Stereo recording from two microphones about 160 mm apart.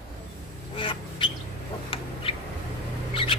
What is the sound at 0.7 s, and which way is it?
Duck, 35° left (ahead or behind).